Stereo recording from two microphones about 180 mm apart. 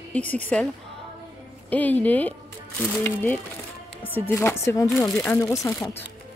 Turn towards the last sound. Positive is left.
turn(degrees=15)  # may be behind; listen again after turning